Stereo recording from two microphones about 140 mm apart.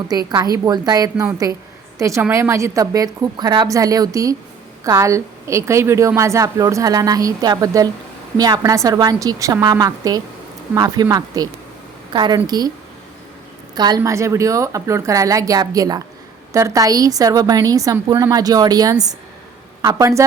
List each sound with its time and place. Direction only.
0.1 s a woman's voice: 25° right (ahead or behind)
13.7 s a woman's voice: 30° right (ahead or behind)